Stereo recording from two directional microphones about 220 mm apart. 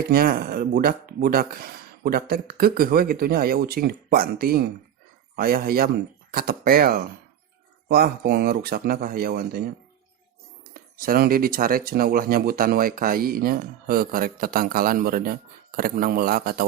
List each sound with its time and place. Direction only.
0.1 s speech: 40° right (ahead or behind)